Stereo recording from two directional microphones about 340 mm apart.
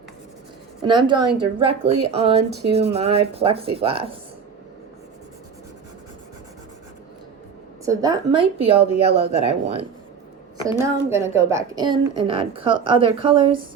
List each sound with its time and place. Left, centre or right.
0.8 s a woman's voice: centre
7.9 s a woman's voice: centre